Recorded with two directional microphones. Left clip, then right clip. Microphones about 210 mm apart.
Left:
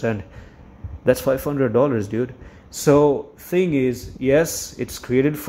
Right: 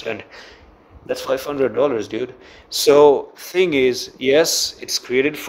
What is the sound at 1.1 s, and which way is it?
Speech, centre (ahead or behind).